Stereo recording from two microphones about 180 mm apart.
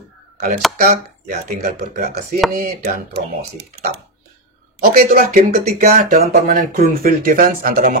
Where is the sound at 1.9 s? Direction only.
55° right (ahead or behind).